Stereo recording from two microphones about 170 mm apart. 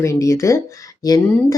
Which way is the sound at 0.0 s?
15° left (ahead or behind).